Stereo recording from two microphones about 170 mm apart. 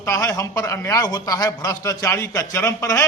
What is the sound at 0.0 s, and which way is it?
A man's voice, 15° left (ahead or behind).